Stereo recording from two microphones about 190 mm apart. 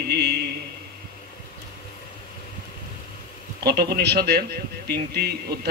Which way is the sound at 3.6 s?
60° right (ahead or behind).